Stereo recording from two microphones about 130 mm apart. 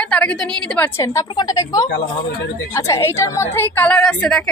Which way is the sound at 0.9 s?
25° left (ahead or behind).